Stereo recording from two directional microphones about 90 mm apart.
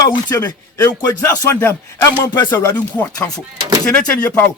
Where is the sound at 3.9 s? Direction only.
15° left (ahead or behind).